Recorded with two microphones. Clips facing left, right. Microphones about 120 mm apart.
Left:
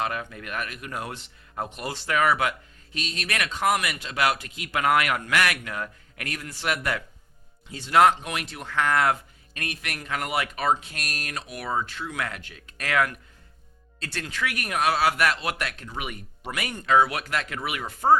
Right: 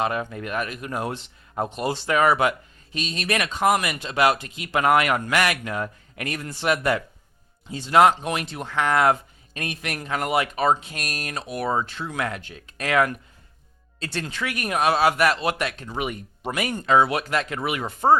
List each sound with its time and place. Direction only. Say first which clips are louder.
0.0 s speech: right 5 dB; 25° right (ahead or behind)